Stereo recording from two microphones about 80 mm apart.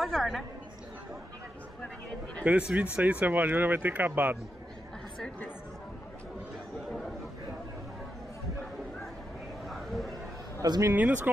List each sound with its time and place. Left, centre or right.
0.0 s a woman's voice: centre
2.4 s speech: centre
9.7 s a sound: centre
10.6 s speech: right
10.9 s speech: right